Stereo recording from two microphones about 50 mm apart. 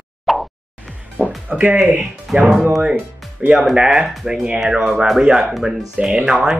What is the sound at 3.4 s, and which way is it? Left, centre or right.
Speech, right.